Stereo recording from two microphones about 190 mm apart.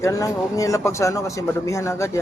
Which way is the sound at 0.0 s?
15° left (ahead or behind).